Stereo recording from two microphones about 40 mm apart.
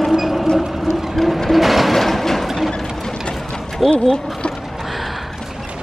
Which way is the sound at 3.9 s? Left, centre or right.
Centre.